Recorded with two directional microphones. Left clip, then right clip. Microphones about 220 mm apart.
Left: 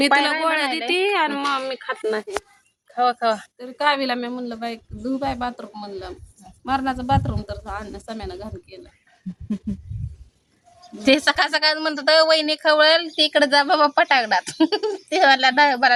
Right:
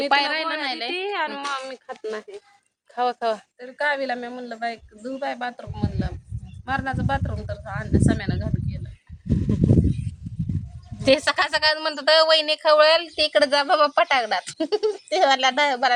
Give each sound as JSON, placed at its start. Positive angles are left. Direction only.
{"t": 0.1, "sound": "a woman's voice", "side_deg": 0}
{"t": 0.9, "sound": "a sound", "side_deg": 50}
{"t": 2.9, "sound": "speech", "side_deg": -20}
{"t": 3.6, "sound": "speech", "side_deg": 15}
{"t": 11.0, "sound": "a woman's voice", "side_deg": -15}